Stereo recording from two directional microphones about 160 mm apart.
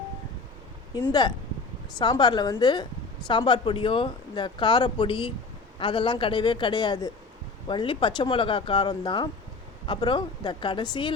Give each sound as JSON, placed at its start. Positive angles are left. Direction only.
{"t": 2.0, "sound": "speech", "side_deg": 25}